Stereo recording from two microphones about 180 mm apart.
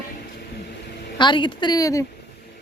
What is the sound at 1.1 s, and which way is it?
Speech, 25° left (ahead or behind).